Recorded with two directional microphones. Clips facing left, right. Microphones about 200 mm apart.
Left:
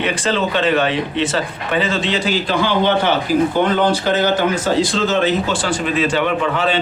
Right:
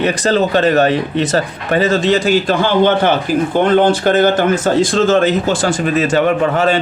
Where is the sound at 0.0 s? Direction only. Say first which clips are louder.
Right 5 dB; 40° right (ahead or behind).